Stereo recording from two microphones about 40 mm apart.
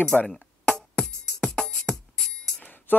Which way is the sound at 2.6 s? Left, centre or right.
Left.